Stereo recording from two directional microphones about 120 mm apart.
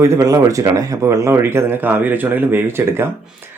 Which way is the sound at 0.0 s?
25° right (ahead or behind).